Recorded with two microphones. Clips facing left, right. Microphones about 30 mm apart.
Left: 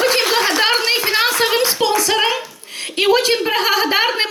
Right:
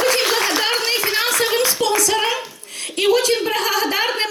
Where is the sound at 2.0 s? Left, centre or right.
Left.